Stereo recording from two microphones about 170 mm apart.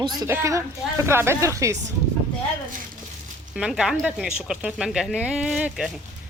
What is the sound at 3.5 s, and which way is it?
Speech, centre (ahead or behind).